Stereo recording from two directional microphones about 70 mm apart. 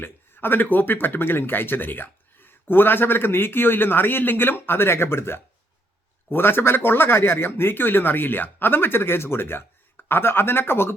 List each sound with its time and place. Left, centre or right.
0.0 s speech: left